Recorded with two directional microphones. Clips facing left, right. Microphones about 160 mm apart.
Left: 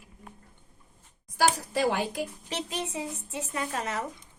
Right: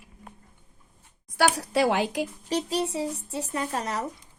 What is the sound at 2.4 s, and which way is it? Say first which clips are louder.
Speech: right 7 dB; 40° right (ahead or behind).